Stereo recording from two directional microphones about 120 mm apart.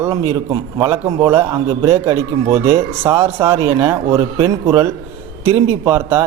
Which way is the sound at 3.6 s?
40° right (ahead or behind).